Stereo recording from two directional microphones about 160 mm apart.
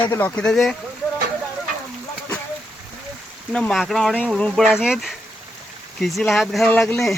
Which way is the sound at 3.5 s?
5° left (ahead or behind).